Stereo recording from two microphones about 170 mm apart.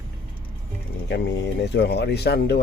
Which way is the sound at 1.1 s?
85° left.